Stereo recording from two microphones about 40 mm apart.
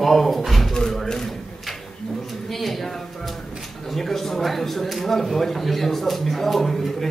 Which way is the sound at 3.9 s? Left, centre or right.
Centre.